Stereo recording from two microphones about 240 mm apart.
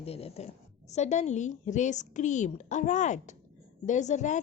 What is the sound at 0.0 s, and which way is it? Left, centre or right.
A woman's voice, left.